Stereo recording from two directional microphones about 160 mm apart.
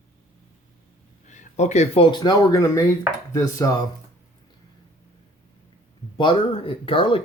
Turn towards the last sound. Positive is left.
turn(degrees=35)  # may be behind; listen again after turning